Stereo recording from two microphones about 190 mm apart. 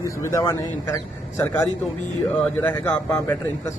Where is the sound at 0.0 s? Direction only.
15° left (ahead or behind).